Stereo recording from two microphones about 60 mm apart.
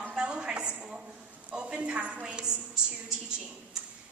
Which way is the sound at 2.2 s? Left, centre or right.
Centre.